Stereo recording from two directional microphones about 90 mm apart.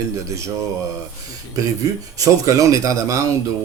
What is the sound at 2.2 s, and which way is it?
Speech, 40° right (ahead or behind).